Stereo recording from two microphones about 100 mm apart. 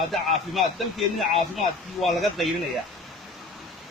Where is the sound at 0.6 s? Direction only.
Centre (ahead or behind).